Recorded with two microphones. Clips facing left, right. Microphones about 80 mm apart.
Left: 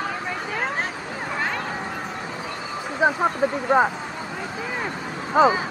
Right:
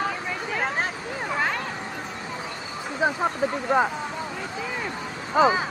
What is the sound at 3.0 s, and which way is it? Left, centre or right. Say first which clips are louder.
Speech: left 3 dB; centre.